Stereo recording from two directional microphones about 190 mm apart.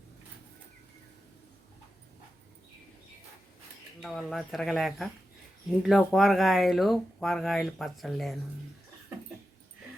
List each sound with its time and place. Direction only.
4.0 s speech: centre (ahead or behind)